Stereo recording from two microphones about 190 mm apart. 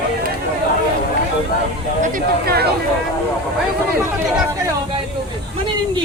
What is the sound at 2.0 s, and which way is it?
Speech, 50° right (ahead or behind).